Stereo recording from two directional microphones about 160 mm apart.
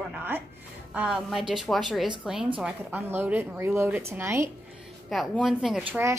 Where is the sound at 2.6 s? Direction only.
10° right (ahead or behind).